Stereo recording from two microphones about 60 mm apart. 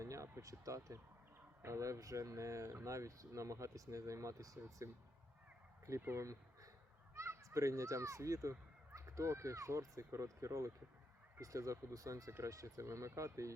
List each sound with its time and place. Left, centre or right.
0.0 s speech: right
6.1 s speech: right